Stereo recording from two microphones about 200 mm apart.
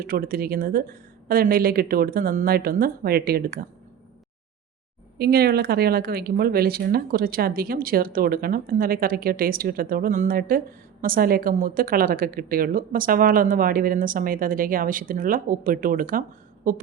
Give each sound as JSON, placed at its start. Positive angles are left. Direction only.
{"t": 0.0, "sound": "speech", "side_deg": -45}
{"t": 5.1, "sound": "speech", "side_deg": -50}